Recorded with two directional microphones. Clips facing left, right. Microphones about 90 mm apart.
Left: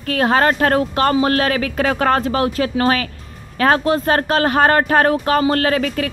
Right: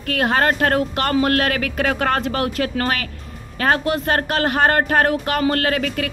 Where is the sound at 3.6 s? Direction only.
35° left (ahead or behind).